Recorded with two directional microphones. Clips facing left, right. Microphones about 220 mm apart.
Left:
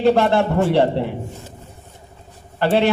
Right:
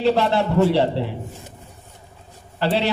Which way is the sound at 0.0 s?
50° left (ahead or behind).